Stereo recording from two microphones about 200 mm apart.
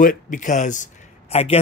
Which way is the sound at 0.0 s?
40° left (ahead or behind).